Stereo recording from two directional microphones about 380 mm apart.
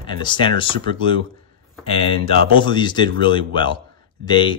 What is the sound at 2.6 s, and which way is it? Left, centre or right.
A man's voice, centre.